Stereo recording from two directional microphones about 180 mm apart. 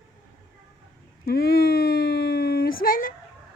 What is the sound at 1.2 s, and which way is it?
Speech, 60° left (ahead or behind).